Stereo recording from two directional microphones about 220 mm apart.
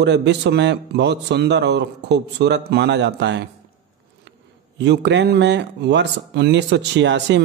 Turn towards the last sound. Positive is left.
turn(degrees=-50)  # may be behind; listen again after turning